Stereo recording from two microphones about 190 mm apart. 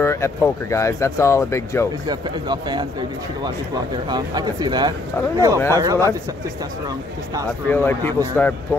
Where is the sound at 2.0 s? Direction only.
20° right (ahead or behind).